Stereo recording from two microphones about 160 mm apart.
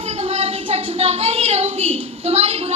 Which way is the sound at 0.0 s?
40° right (ahead or behind).